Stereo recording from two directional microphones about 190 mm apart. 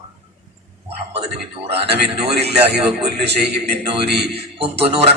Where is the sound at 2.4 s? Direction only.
60° right (ahead or behind).